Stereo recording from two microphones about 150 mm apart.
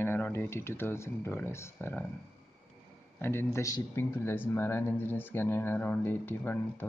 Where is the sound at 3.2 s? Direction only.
15° left (ahead or behind).